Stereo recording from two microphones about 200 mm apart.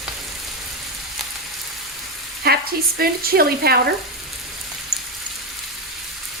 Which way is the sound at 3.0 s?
50° right (ahead or behind).